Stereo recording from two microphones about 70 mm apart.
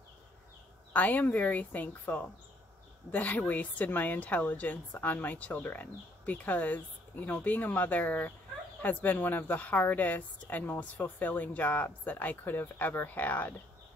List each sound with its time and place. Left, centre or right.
0.9 s a woman's voice: left